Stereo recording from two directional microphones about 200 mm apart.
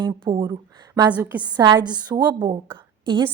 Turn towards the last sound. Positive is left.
turn(degrees=-20)  # may be behind; listen again after turning